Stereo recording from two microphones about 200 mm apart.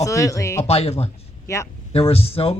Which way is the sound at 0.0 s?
15° left (ahead or behind).